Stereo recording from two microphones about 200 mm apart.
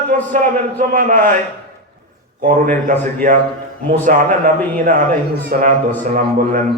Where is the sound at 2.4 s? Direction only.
40° right (ahead or behind).